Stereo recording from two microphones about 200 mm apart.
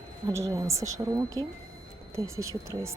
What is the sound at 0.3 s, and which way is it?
A woman's voice, 15° right (ahead or behind).